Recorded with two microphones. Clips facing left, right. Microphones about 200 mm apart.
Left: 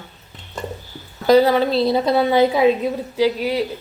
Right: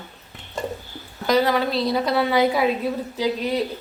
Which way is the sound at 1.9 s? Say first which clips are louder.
Left 4 dB; 25° left (ahead or behind).